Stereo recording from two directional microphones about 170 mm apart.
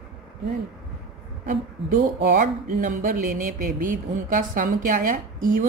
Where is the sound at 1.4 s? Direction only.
55° right (ahead or behind).